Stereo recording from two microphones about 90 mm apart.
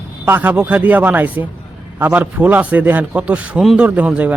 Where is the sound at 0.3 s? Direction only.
20° right (ahead or behind).